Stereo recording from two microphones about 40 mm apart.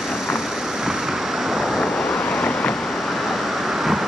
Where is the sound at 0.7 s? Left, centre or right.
Centre.